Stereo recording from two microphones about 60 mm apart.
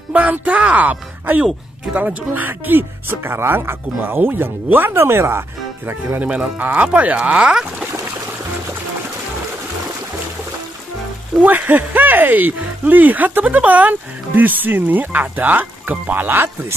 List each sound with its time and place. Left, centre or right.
0.1 s speech: right
6.2 s speech: centre
11.4 s speech: right